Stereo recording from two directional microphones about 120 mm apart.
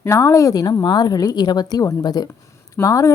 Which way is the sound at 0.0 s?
25° left (ahead or behind).